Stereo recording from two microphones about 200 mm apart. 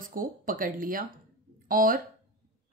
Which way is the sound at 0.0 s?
45° right (ahead or behind).